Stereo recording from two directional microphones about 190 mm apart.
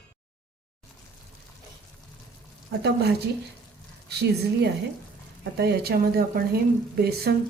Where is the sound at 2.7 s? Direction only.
60° right (ahead or behind).